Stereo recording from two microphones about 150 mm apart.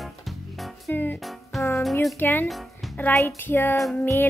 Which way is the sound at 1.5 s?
Centre (ahead or behind).